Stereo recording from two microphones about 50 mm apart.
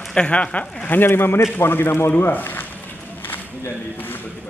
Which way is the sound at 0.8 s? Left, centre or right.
Left.